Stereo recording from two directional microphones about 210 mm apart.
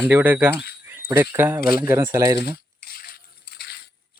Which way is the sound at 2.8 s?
45° left (ahead or behind).